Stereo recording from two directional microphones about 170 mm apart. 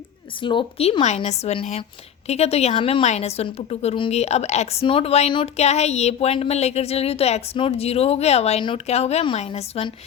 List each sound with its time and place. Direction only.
0.4 s a woman's voice: 30° left (ahead or behind)